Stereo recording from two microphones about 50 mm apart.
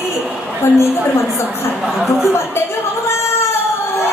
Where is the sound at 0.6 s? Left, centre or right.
Left.